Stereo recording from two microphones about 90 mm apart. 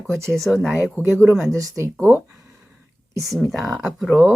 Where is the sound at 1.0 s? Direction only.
25° right (ahead or behind).